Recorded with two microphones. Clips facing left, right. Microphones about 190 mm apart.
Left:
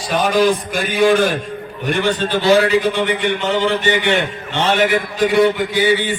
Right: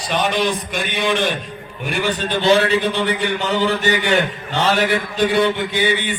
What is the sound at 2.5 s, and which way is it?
A man's voice, 25° right (ahead or behind).